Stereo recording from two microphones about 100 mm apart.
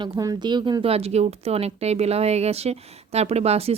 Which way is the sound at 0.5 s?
50° right (ahead or behind).